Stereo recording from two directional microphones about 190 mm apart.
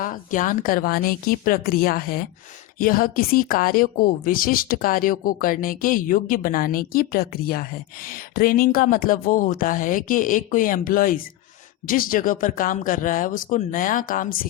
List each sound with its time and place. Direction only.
0.0 s speech: 45° left (ahead or behind)